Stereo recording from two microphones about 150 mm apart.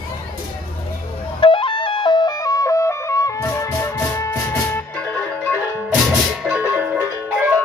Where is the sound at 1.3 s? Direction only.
35° left (ahead or behind); by 5.6 s 10° left (ahead or behind).